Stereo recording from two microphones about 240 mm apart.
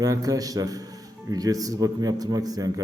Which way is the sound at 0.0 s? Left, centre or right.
Centre.